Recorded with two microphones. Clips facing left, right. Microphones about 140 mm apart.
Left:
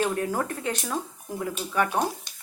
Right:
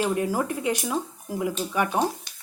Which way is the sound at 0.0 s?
10° right (ahead or behind).